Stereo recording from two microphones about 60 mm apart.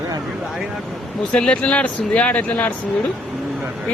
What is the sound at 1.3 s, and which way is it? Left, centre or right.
Speech, centre.